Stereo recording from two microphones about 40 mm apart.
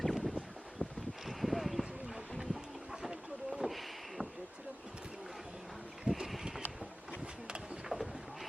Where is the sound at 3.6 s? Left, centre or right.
Right.